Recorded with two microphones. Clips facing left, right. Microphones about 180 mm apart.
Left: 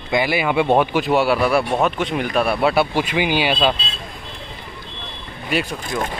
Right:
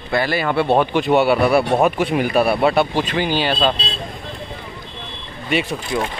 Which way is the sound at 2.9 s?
10° left (ahead or behind).